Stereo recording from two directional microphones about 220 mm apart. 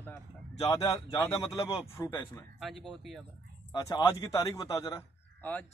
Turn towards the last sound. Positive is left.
turn(degrees=15)  # may be behind; listen again after turning